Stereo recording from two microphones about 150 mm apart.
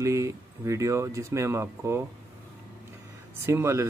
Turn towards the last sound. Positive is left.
turn(degrees=-15)  # may be behind; listen again after turning